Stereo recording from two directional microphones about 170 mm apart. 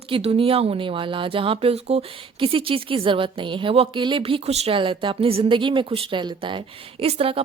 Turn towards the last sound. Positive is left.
turn(degrees=-35)  # may be behind; listen again after turning